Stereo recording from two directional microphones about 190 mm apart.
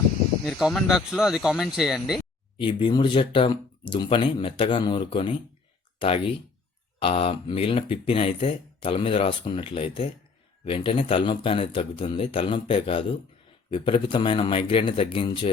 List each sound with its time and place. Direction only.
0.4 s speech: centre (ahead or behind)
2.6 s speech: 25° left (ahead or behind)